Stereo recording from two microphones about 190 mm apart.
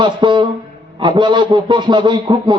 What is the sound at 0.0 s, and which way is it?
A man's voice, 25° right (ahead or behind).